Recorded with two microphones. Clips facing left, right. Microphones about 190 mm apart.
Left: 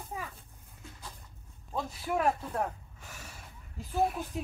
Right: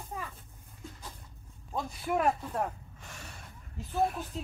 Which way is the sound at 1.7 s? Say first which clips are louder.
Right 1 dB; 5° right (ahead or behind).